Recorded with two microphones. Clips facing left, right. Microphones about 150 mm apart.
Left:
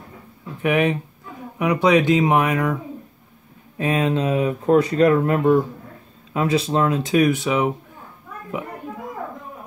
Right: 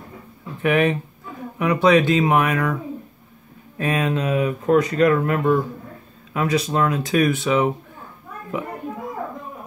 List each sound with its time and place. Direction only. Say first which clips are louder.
0.6 s speech: right 1 dB; 15° left (ahead or behind)